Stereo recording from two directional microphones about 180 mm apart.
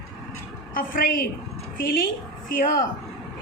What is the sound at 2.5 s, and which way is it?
Speech, 50° left (ahead or behind).